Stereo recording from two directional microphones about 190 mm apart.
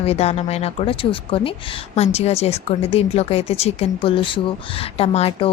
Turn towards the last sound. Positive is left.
turn(degrees=30)  # may be behind; listen again after turning